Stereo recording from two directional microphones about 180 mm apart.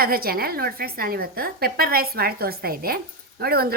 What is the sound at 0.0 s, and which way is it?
A woman's voice, 55° right (ahead or behind).